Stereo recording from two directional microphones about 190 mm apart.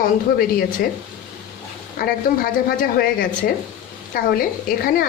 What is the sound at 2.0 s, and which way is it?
Speech, 50° left (ahead or behind).